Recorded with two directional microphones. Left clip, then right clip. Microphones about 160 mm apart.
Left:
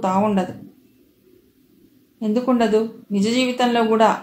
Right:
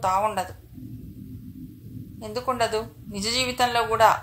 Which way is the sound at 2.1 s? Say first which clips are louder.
Left 6 dB; 30° right (ahead or behind).